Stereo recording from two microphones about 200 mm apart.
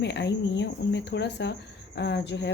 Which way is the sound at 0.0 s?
60° left (ahead or behind).